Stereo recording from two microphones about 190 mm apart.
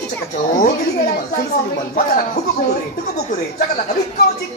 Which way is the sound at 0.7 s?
50° left (ahead or behind).